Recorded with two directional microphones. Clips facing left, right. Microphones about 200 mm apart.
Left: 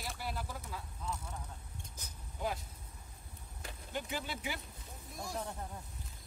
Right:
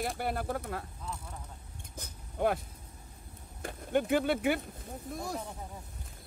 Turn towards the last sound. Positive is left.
turn(degrees=-55)  # may be behind; listen again after turning